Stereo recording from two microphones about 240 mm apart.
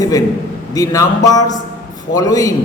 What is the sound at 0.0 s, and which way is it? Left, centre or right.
A man's voice, centre.